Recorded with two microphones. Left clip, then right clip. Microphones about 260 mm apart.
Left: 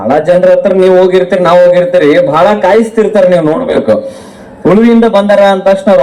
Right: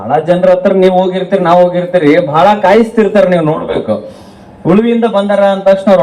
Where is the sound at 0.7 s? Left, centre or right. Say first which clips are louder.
Left 3 dB; left.